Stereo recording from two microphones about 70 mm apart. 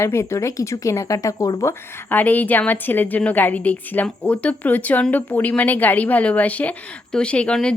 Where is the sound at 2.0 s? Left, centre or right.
Left.